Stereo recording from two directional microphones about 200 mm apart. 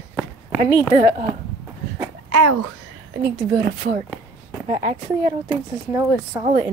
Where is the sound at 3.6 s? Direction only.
40° right (ahead or behind).